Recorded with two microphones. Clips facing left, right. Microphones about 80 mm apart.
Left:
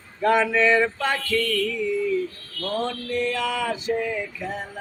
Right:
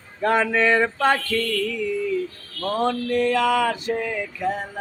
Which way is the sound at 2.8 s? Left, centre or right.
Right.